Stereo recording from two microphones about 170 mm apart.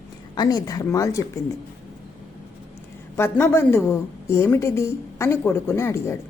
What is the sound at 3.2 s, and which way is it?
A woman's voice, 15° left (ahead or behind).